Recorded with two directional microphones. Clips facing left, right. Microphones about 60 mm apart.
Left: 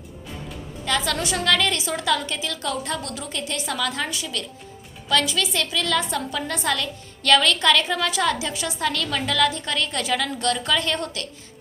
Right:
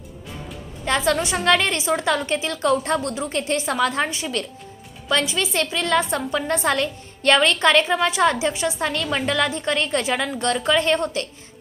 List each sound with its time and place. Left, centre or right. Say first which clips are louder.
0.9 s a woman's voice: right 4 dB; right